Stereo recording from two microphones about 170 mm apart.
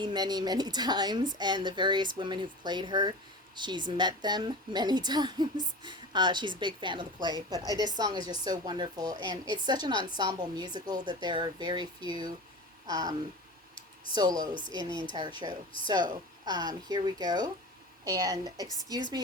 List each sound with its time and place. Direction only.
0.0 s a woman's voice: 25° right (ahead or behind)
13.7 s computer keyboard: 30° left (ahead or behind)
14.2 s a woman's voice: 25° right (ahead or behind)